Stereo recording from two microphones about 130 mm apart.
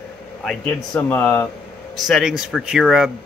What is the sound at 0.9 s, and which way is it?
Speech, 15° left (ahead or behind).